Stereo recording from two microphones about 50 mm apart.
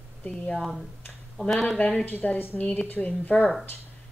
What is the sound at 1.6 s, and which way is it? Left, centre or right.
A woman's voice, left.